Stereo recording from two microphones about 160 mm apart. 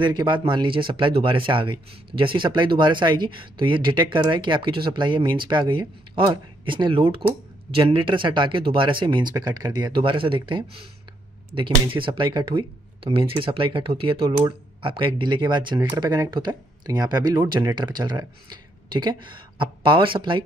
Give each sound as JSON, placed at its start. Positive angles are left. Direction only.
{"t": 0.0, "sound": "speech", "side_deg": -30}